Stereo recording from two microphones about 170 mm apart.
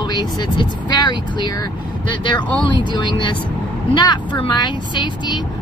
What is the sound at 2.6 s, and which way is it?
Speech, 25° left (ahead or behind).